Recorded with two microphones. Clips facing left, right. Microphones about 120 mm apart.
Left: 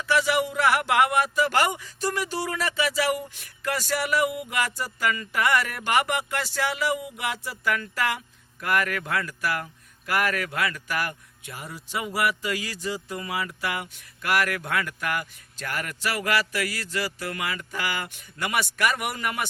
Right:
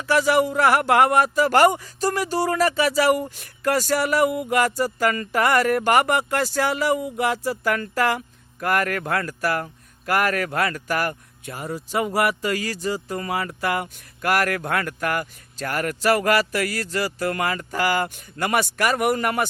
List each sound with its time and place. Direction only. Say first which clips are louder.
0.0 s speech: right 5 dB; 45° right (ahead or behind)